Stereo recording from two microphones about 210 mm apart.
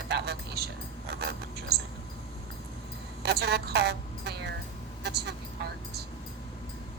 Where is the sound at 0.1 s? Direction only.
50° right (ahead or behind).